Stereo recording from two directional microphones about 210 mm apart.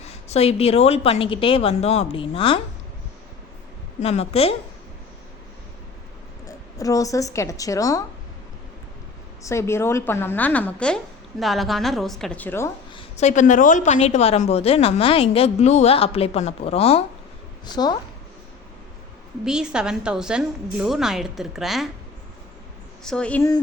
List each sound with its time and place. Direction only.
0.0 s a woman's voice: 30° left (ahead or behind)
4.0 s a woman's voice: 30° left (ahead or behind)
6.7 s a woman's voice: 15° left (ahead or behind)
9.4 s a woman's voice: 15° left (ahead or behind)
13.1 s a woman's voice: 35° left (ahead or behind)
19.5 s a woman's voice: 5° right (ahead or behind)
23.0 s a woman's voice: 5° left (ahead or behind)